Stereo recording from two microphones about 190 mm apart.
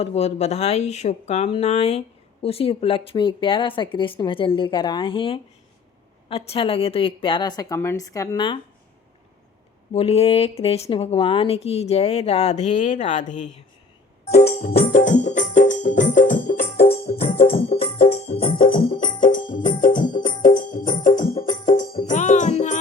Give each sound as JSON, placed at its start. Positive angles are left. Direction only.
{"t": 0.0, "sound": "speech", "side_deg": 35}
{"t": 9.9, "sound": "a woman's voice", "side_deg": 30}
{"t": 14.6, "sound": "music", "side_deg": 50}
{"t": 16.7, "sound": "music", "side_deg": 55}
{"t": 17.7, "sound": "music", "side_deg": 30}
{"t": 18.4, "sound": "music", "side_deg": 50}